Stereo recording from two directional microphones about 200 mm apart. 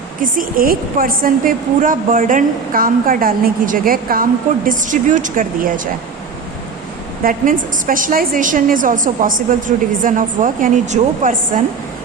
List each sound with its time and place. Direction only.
0.2 s a woman's voice: 45° right (ahead or behind)
7.3 s a woman's voice: 45° right (ahead or behind)